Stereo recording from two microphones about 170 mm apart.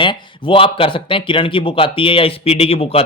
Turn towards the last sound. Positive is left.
turn(degrees=35)  # may be behind; listen again after turning